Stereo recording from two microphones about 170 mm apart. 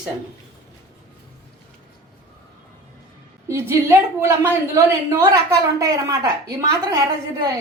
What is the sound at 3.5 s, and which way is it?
A woman's voice, 15° right (ahead or behind).